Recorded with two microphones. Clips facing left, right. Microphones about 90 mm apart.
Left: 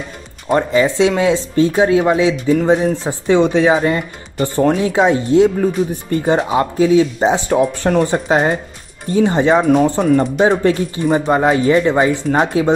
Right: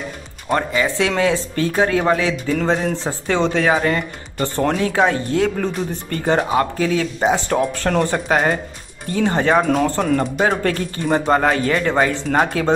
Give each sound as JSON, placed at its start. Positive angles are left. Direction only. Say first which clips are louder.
{"t": 0.8, "sound": "speech", "louder": "left 4 dB", "side_deg": 20}